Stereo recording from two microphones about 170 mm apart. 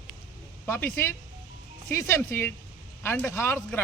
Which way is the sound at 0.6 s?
10° left (ahead or behind).